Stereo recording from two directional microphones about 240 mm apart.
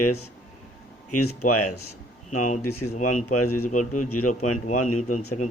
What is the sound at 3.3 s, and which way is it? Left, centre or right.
Speech, left.